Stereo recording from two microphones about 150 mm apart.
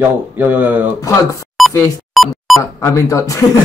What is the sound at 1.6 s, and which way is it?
Music, centre (ahead or behind).